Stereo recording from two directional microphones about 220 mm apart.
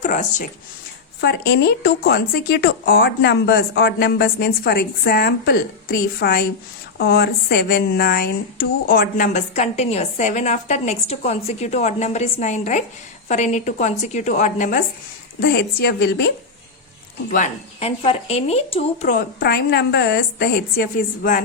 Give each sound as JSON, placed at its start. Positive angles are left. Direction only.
{"t": 0.0, "sound": "speech", "side_deg": 35}
{"t": 1.2, "sound": "a woman's voice", "side_deg": 50}
{"t": 15.4, "sound": "speech", "side_deg": 50}
{"t": 17.3, "sound": "speech", "side_deg": 30}
{"t": 19.1, "sound": "speech", "side_deg": 45}